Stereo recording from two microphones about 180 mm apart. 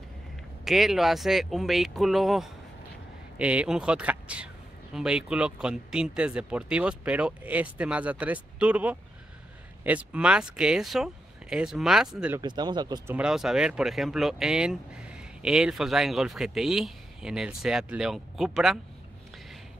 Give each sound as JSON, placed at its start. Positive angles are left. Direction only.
{"t": 0.7, "sound": "speech", "side_deg": 0}
{"t": 12.4, "sound": "speech", "side_deg": -25}
{"t": 13.1, "sound": "speech", "side_deg": -5}